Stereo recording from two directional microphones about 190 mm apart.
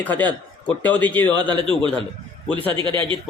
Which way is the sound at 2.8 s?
25° right (ahead or behind).